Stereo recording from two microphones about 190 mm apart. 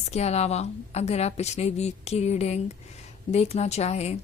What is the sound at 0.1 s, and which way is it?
A woman's voice, 35° left (ahead or behind).